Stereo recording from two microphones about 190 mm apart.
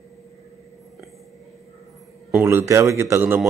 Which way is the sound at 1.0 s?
Centre (ahead or behind).